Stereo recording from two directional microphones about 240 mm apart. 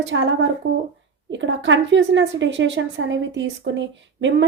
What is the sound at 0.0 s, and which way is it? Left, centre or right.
A woman's voice, right.